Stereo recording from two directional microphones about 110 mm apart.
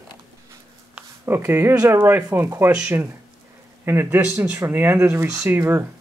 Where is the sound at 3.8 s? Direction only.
20° right (ahead or behind).